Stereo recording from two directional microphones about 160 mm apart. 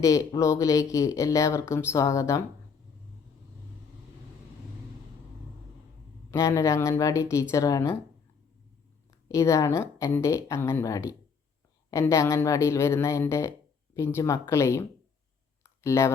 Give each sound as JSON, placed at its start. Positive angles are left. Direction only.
{"t": 0.0, "sound": "speech", "side_deg": 20}
{"t": 6.3, "sound": "speech", "side_deg": 20}
{"t": 9.3, "sound": "speech", "side_deg": 20}
{"t": 15.6, "sound": "a sound", "side_deg": 20}